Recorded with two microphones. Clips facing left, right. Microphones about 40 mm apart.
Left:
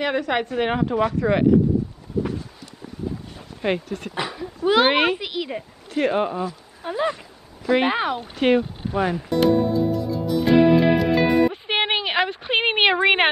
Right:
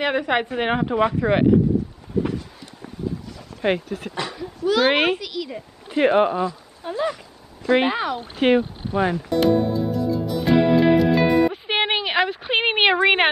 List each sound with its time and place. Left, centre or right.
0.0 s speech: centre
3.6 s speech: centre
4.1 s speech: centre
4.9 s a child's voice: centre
5.2 s a woman's voice: left
5.9 s speech: right
6.8 s speech: centre
8.4 s speech: centre
9.1 s music: centre